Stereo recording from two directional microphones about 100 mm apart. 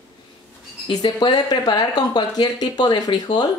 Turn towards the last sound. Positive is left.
turn(degrees=45)  # may be behind; listen again after turning